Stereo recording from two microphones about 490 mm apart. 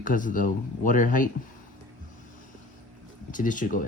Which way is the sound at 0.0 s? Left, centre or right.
Centre.